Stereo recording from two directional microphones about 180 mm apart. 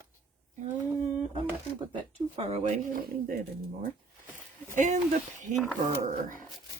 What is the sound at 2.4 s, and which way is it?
Speech, 35° right (ahead or behind).